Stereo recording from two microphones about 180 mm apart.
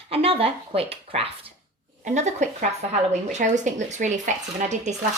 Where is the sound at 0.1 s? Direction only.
30° right (ahead or behind).